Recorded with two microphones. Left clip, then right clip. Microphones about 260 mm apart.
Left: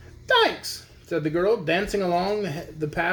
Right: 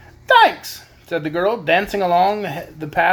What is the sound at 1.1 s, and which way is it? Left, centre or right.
Speech, centre.